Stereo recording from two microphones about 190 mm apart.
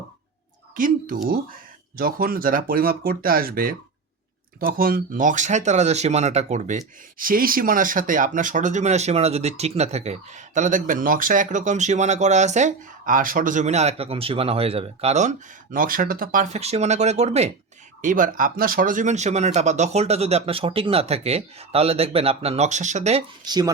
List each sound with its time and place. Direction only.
0.8 s speech: 45° right (ahead or behind)
18.0 s speech: 45° right (ahead or behind)
23.5 s speech: 20° right (ahead or behind)